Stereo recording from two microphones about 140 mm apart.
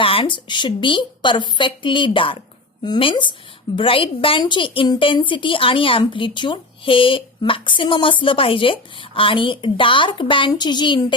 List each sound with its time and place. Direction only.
0.0 s a woman's voice: 40° left (ahead or behind)